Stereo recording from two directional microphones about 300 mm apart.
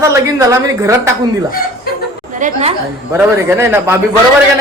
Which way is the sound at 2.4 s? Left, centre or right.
Right.